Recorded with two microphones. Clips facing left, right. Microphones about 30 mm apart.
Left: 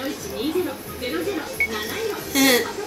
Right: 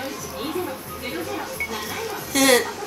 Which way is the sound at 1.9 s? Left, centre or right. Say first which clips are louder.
Left 3 dB; centre.